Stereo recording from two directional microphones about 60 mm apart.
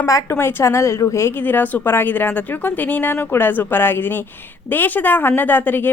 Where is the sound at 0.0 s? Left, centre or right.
Left.